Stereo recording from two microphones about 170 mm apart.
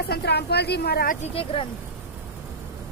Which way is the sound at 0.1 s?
80° left.